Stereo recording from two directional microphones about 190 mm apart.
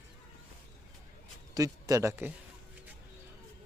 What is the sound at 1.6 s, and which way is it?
Speech, 20° right (ahead or behind).